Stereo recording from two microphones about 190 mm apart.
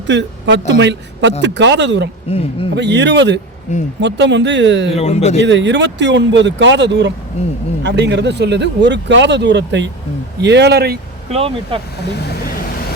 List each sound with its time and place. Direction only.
0.1 s speech: 70° right (ahead or behind)
4.9 s speech: 35° left (ahead or behind)
5.4 s speech: 70° right (ahead or behind)
7.4 s speech: 35° left (ahead or behind)
7.9 s speech: 65° right (ahead or behind)
11.3 s speech: 30° right (ahead or behind)